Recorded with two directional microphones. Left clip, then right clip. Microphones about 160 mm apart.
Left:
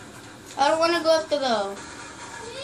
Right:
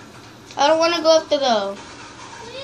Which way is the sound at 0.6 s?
55° right (ahead or behind).